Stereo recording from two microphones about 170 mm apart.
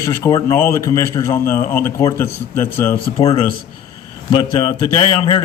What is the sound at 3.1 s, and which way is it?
A man's voice, 30° left (ahead or behind).